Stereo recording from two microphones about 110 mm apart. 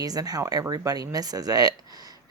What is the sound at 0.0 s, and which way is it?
Speech, 35° right (ahead or behind).